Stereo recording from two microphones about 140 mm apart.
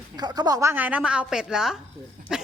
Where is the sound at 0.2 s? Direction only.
30° right (ahead or behind); by 1.8 s 5° right (ahead or behind).